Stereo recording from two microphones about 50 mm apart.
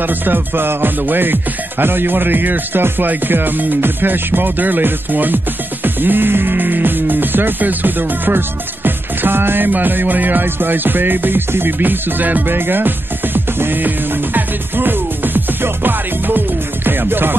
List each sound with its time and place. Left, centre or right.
0.0 s music: right